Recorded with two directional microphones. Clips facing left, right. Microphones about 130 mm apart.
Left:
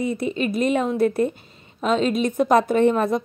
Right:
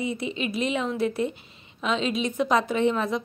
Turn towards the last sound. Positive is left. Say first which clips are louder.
# left 6 dB
turn(degrees=50)  # may be behind; listen again after turning